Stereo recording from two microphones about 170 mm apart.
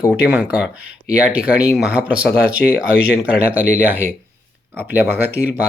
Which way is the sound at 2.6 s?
80° left.